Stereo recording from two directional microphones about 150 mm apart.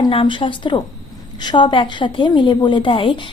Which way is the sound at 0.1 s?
35° left (ahead or behind).